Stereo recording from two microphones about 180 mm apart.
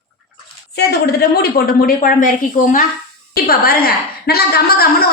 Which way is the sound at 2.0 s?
45° left (ahead or behind).